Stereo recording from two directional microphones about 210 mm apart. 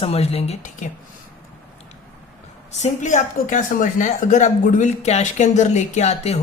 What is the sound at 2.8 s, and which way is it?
A woman's voice, 35° left (ahead or behind).